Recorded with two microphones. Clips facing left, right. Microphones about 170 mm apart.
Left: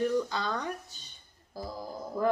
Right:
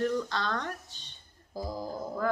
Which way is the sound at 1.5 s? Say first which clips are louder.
Right 3 dB; 15° right (ahead or behind).